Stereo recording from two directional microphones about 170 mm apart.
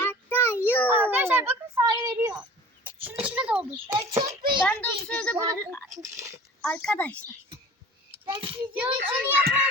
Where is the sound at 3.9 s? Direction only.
20° right (ahead or behind).